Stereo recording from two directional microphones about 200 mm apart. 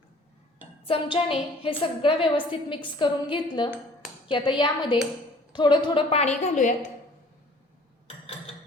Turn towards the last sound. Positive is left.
turn(degrees=40)  # may be behind; listen again after turning